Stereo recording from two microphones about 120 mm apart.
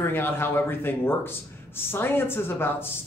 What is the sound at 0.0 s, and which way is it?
Speech, 15° left (ahead or behind).